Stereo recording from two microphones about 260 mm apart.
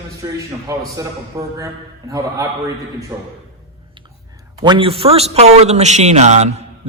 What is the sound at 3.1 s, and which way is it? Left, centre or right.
Speech, centre.